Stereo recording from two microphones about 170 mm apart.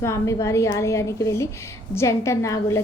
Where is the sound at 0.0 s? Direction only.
15° left (ahead or behind).